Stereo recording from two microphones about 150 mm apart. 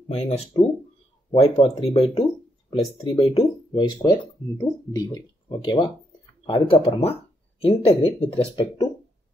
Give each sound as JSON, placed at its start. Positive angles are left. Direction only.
{"t": 0.1, "sound": "speech", "side_deg": 45}